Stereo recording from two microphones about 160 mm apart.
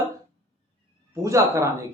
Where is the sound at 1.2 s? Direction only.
20° right (ahead or behind).